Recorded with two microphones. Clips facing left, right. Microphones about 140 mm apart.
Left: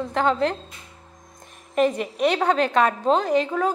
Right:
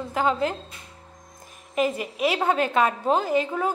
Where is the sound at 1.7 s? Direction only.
5° right (ahead or behind).